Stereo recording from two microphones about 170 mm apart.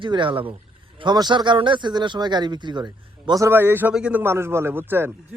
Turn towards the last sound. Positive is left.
turn(degrees=-15)  # may be behind; listen again after turning